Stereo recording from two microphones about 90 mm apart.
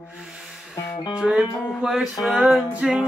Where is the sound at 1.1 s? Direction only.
10° right (ahead or behind).